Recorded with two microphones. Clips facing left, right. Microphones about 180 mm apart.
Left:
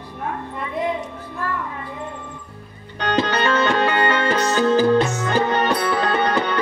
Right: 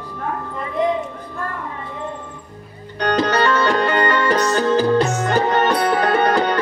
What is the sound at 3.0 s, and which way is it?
Music, 45° right (ahead or behind).